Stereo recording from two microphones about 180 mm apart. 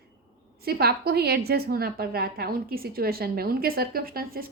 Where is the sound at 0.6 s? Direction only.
60° right (ahead or behind).